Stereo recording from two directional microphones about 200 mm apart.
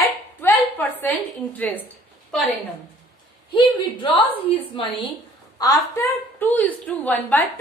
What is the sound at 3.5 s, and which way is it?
A woman's voice, 25° left (ahead or behind).